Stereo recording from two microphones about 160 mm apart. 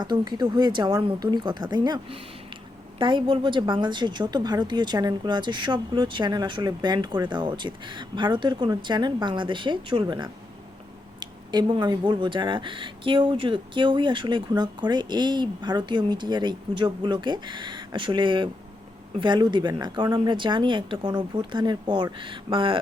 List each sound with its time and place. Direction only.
0.0 s speech: 25° right (ahead or behind)